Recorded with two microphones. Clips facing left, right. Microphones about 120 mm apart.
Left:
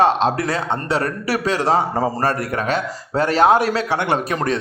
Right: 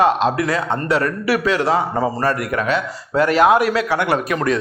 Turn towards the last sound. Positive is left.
turn(degrees=30)  # may be behind; listen again after turning